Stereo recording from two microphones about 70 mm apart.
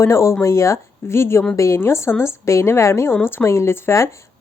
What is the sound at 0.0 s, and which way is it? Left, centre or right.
Speech, left.